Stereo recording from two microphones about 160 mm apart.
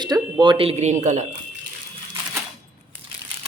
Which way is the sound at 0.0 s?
25° right (ahead or behind).